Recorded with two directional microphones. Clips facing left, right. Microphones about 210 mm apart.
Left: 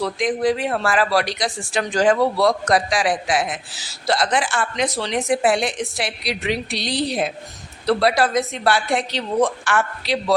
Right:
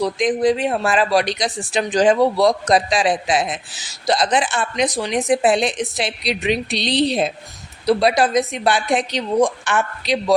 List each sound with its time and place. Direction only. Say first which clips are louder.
0.0 s a woman's voice: right 3 dB; 20° right (ahead or behind)